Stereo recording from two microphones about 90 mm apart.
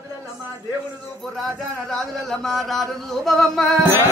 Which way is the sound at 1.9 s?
5° left (ahead or behind).